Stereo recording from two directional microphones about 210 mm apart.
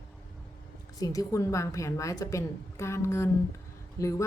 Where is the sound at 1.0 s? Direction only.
15° left (ahead or behind).